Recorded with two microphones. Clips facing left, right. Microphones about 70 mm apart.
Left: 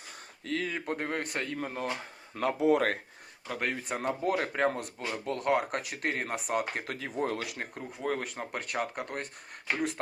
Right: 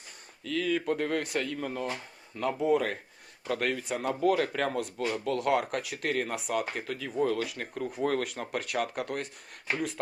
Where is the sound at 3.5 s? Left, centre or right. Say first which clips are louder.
Right 4 dB; centre.